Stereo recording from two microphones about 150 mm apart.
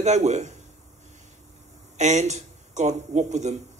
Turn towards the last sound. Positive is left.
turn(degrees=-50)  # may be behind; listen again after turning